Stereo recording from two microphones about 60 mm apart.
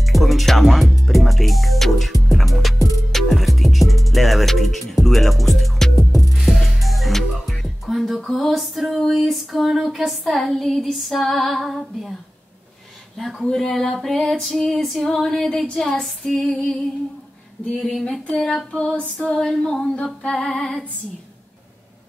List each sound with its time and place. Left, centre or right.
0.0 s speech: centre
1.0 s music: centre
13.2 s music: centre
17.7 s music: centre
18.3 s female singing: centre